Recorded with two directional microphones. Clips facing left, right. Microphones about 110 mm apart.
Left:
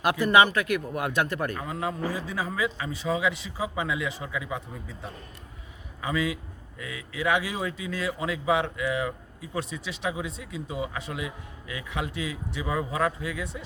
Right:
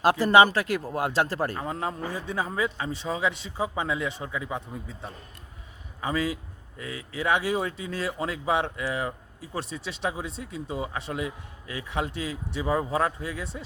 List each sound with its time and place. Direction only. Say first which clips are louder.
0.0 s a man's voice: right 2 dB; 35° right (ahead or behind)
6.0 s a man's voice: even; 30° right (ahead or behind)